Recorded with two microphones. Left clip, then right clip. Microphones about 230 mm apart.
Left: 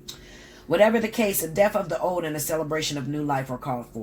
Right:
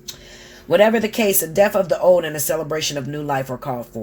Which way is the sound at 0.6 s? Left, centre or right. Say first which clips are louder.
Right 5 dB; right.